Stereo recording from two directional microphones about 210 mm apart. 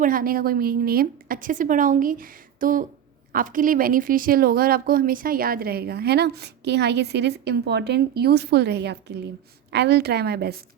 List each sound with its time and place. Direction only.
0.0 s a woman's voice: 40° right (ahead or behind)